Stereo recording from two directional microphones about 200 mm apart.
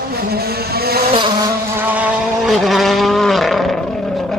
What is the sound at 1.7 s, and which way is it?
Vehicle, 10° right (ahead or behind).